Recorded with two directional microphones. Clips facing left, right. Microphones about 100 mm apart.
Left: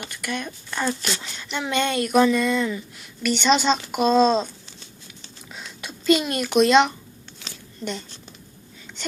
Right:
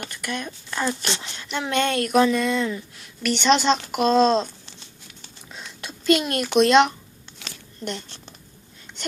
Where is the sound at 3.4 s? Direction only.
Centre (ahead or behind).